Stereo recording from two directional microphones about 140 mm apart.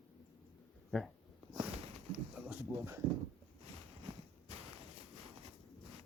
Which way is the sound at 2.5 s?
20° right (ahead or behind).